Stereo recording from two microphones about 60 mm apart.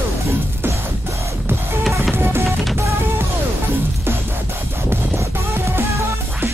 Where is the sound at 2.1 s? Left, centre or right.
Right.